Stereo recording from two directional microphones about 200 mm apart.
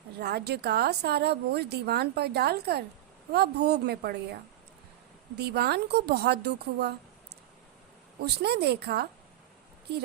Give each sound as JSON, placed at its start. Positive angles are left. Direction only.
{"t": 0.2, "sound": "speech", "side_deg": -55}
{"t": 5.4, "sound": "a woman's voice", "side_deg": -55}
{"t": 8.2, "sound": "speech", "side_deg": -55}